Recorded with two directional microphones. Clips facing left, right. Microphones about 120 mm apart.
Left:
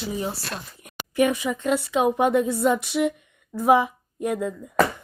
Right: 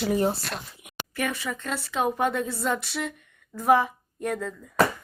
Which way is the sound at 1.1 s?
15° left (ahead or behind).